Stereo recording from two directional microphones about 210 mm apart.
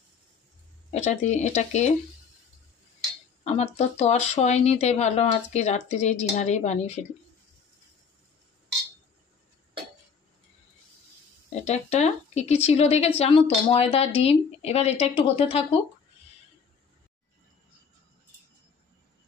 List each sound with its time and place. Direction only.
0.9 s speech: 35° left (ahead or behind)
3.4 s speech: 30° left (ahead or behind)
11.6 s a woman's voice: 30° left (ahead or behind)